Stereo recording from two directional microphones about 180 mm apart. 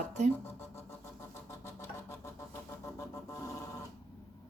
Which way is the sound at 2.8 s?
15° left (ahead or behind).